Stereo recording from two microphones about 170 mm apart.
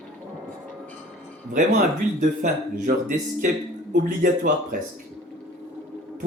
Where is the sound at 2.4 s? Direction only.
50° right (ahead or behind).